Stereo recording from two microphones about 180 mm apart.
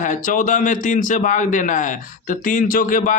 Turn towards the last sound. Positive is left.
turn(degrees=50)  # may be behind; listen again after turning